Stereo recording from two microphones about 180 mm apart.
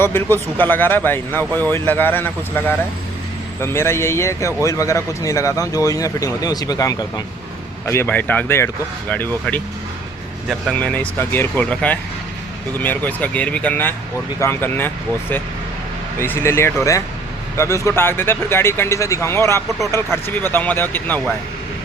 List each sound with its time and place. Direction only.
0.0 s speech: 10° left (ahead or behind)